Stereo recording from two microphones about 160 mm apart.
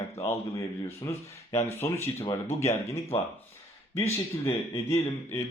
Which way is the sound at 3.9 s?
15° left (ahead or behind).